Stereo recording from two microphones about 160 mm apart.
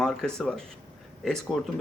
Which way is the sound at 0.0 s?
5° left (ahead or behind).